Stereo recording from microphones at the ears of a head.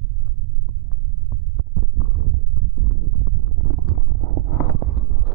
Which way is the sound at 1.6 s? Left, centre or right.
Right.